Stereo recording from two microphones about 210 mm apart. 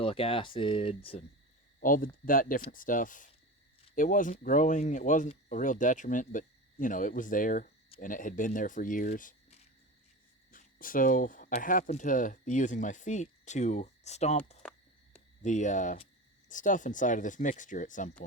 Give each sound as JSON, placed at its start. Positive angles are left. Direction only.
{"t": 0.0, "sound": "speech", "side_deg": 25}
{"t": 1.8, "sound": "speech", "side_deg": 40}